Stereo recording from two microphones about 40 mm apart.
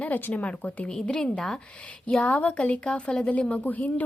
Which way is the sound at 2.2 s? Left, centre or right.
Left.